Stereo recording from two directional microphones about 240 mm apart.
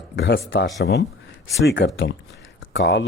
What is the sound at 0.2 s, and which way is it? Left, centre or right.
A man's voice, left.